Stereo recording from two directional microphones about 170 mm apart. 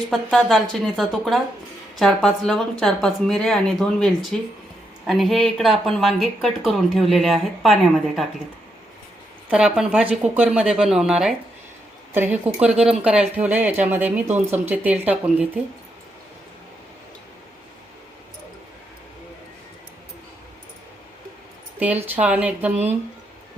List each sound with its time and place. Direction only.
0.1 s speech: centre (ahead or behind)
9.5 s speech: 5° right (ahead or behind)
22.0 s speech: 10° right (ahead or behind)